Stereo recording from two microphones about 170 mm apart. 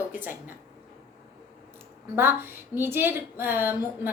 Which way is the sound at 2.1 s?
15° right (ahead or behind).